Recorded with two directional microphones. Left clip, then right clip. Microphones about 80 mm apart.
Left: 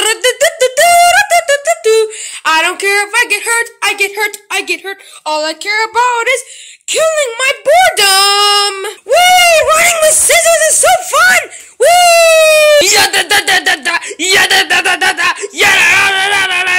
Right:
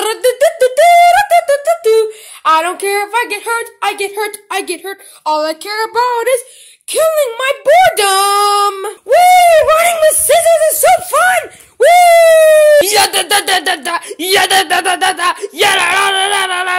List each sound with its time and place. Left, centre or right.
0.0 s a sound: right
0.7 s beatboxing: centre
2.7 s a sound: right
3.5 s a woman's voice: right
4.8 s speech: right
7.6 s speech: centre
7.9 s speech: right
16.2 s speech: right